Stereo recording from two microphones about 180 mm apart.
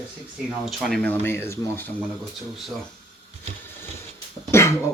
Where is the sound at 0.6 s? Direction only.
Centre (ahead or behind).